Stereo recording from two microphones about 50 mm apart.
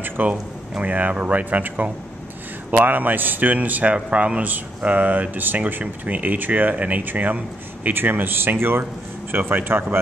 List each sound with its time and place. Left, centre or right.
0.3 s speech: right
3.9 s speech: right
9.4 s speech: right